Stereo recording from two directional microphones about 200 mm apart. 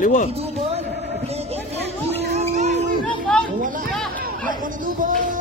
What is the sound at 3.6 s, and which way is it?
Chatter, 45° right (ahead or behind).